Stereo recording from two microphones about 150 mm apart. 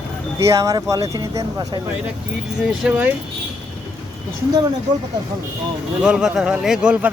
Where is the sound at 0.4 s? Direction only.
20° right (ahead or behind).